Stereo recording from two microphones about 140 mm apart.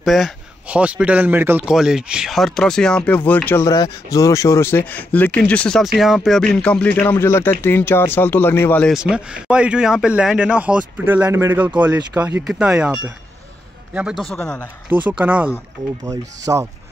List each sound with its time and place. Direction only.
0.0 s speech: centre (ahead or behind)
1.7 s speech: 5° right (ahead or behind); by 8.9 s 15° left (ahead or behind)
8.9 s speech: 5° right (ahead or behind)
14.9 s speech: 10° right (ahead or behind)
16.1 s speech: 25° right (ahead or behind)